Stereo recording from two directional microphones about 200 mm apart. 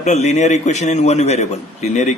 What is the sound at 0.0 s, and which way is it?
A man's voice, 35° left (ahead or behind).